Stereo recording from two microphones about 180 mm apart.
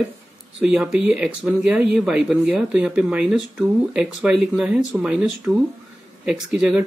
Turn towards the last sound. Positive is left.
turn(degrees=-5)  # may be behind; listen again after turning